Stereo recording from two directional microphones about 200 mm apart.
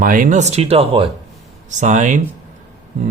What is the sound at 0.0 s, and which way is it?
Speech, 40° right (ahead or behind).